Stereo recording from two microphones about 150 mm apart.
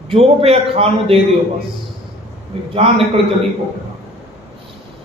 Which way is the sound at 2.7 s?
40° right (ahead or behind).